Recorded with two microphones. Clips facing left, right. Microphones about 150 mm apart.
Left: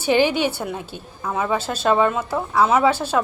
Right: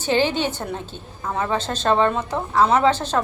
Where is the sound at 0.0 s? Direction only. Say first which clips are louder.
Left 2 dB; 10° left (ahead or behind).